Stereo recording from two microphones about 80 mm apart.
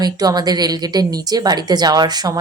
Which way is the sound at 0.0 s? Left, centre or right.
Right.